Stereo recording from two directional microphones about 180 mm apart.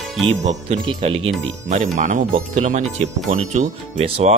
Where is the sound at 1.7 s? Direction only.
45° right (ahead or behind).